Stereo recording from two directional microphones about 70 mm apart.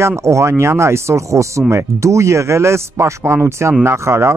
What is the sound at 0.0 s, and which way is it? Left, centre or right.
Speech, right.